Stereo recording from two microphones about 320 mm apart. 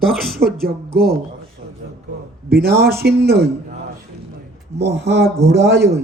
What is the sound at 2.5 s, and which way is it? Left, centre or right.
Speech, right.